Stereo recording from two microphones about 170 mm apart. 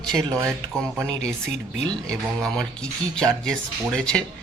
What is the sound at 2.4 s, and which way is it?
Speech, 5° left (ahead or behind).